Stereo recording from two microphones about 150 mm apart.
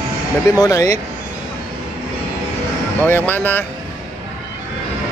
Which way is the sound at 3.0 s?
15° left (ahead or behind).